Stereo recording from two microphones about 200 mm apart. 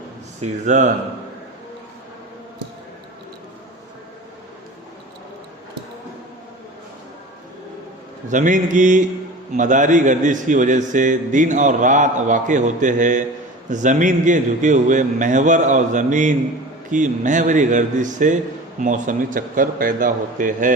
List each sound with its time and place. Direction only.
0.6 s a man's voice: 35° right (ahead or behind)
8.3 s a man's voice: 40° right (ahead or behind)